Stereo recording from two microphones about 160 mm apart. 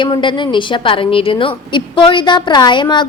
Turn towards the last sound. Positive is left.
turn(degrees=30)  # may be behind; listen again after turning